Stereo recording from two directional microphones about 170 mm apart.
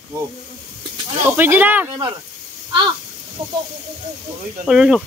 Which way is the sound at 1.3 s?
10° right (ahead or behind).